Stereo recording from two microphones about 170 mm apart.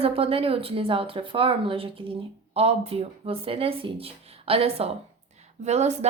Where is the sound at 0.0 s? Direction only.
35° right (ahead or behind).